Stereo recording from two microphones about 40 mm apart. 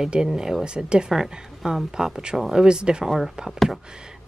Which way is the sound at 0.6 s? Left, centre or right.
Right.